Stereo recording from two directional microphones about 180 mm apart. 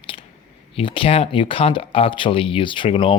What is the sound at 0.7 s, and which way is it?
Speech, 30° left (ahead or behind).